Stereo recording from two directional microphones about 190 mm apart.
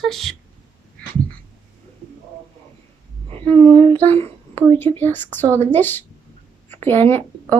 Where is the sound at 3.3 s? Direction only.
30° right (ahead or behind).